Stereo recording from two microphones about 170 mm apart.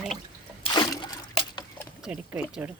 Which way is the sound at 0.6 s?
25° left (ahead or behind).